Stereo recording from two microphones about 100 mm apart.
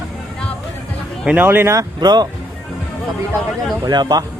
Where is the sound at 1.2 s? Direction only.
15° right (ahead or behind).